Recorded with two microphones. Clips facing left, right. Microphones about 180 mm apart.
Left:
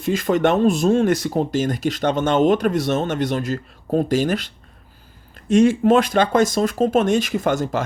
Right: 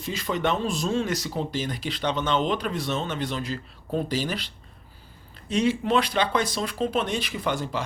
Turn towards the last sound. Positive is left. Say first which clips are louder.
# left 8 dB
turn(degrees=45)  # may be behind; listen again after turning